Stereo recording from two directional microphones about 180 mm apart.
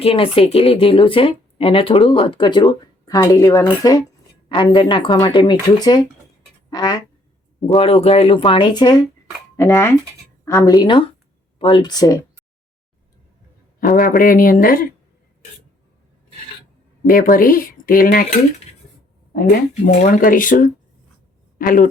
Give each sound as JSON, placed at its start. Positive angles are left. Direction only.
{"t": 0.0, "sound": "speech", "side_deg": 30}
{"t": 6.7, "sound": "a sound", "side_deg": 20}
{"t": 7.6, "sound": "speech", "side_deg": 30}
{"t": 13.7, "sound": "speech", "side_deg": 50}
{"t": 17.1, "sound": "speech", "side_deg": 50}
{"t": 20.0, "sound": "speech", "side_deg": 50}